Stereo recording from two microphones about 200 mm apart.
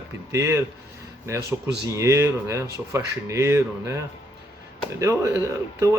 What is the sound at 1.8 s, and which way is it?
Speech, 15° right (ahead or behind).